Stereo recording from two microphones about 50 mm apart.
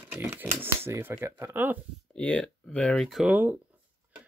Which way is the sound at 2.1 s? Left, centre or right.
Centre.